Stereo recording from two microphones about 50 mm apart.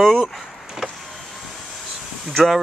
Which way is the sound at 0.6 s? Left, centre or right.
Centre.